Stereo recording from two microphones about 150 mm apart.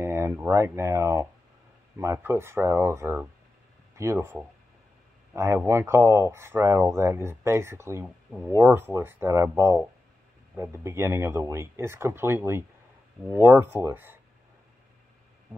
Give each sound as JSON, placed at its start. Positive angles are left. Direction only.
{"t": 0.0, "sound": "speech", "side_deg": -20}